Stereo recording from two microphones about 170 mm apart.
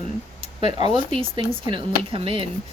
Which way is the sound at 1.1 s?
30° right (ahead or behind).